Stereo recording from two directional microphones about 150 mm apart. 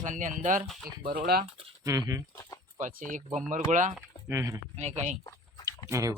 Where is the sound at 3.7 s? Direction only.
55° right (ahead or behind).